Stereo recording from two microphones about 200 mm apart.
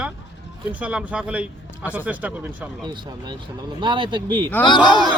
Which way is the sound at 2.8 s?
20° right (ahead or behind).